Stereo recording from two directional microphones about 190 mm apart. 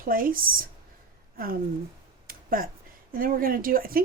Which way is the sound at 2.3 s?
50° right (ahead or behind).